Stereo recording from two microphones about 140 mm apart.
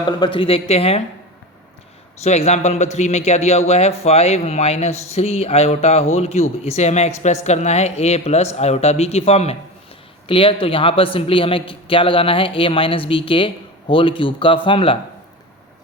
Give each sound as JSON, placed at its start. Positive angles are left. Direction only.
{"t": 0.0, "sound": "a man's voice", "side_deg": 35}
{"t": 2.2, "sound": "a man's voice", "side_deg": 50}